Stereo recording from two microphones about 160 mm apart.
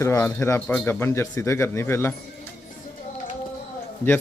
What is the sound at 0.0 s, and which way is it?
A man's voice, 20° left (ahead or behind).